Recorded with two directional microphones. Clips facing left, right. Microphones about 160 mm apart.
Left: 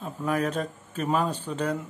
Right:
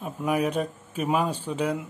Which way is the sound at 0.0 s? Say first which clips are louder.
Right 2 dB; 10° right (ahead or behind).